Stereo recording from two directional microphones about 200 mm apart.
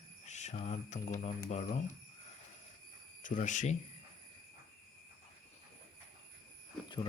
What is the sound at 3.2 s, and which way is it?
Speech, 40° left (ahead or behind).